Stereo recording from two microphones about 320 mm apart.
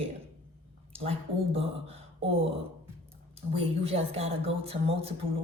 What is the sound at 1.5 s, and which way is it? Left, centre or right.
Speech, centre.